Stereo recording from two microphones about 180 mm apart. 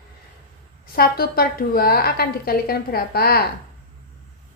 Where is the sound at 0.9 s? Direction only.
55° left (ahead or behind).